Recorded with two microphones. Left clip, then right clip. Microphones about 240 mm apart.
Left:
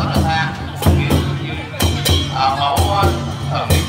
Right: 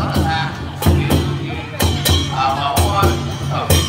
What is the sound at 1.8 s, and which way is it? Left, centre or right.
Music, right.